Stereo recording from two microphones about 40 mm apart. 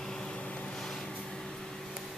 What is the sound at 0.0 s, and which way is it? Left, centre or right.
Vehicle, centre.